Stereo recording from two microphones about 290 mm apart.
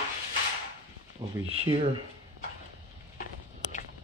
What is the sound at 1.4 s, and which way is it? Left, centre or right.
Speech, right.